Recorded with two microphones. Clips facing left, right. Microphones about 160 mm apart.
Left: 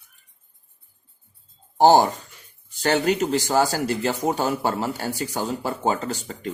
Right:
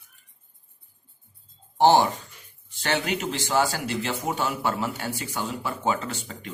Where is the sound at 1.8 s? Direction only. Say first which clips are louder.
Left 3 dB; 40° left (ahead or behind).